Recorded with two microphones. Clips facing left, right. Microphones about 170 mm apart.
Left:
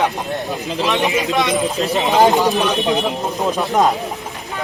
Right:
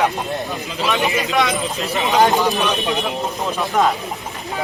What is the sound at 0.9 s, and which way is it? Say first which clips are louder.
Speech: left 1 dB; centre (ahead or behind).